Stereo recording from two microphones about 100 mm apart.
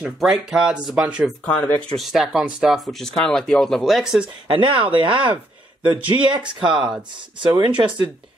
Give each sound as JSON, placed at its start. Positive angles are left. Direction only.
{"t": 0.2, "sound": "speech", "side_deg": -5}
{"t": 1.4, "sound": "speech", "side_deg": 20}
{"t": 2.0, "sound": "speech", "side_deg": 0}
{"t": 4.5, "sound": "speech", "side_deg": -55}